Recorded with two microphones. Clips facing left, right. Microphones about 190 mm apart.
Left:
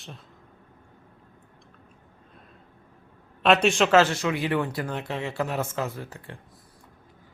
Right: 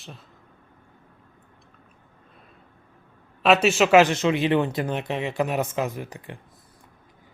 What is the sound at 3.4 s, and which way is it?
A man's voice, 5° right (ahead or behind).